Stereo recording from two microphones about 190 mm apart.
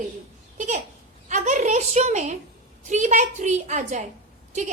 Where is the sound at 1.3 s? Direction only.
40° right (ahead or behind).